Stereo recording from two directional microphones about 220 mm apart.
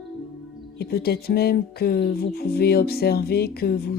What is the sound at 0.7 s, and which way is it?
Speech, 45° left (ahead or behind).